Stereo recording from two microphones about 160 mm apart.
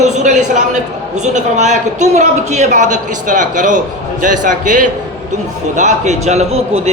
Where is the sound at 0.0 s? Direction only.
45° right (ahead or behind).